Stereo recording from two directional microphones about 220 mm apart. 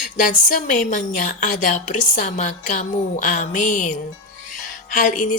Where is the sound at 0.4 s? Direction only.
35° left (ahead or behind).